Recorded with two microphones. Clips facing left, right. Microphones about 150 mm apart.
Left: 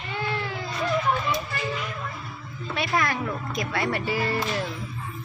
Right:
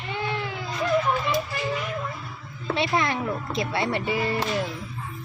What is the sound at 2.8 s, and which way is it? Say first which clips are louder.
Speech: right 1 dB; 25° right (ahead or behind).